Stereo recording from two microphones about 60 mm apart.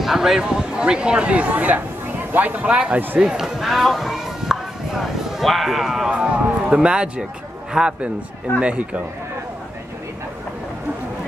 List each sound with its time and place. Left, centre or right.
0.0 s a man's voice: centre; by 3.2 s right
3.2 s a sound: centre
7.7 s a man's voice: centre